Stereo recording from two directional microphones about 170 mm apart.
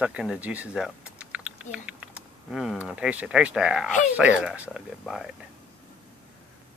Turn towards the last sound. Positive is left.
turn(degrees=0)  # may be behind; listen again after turning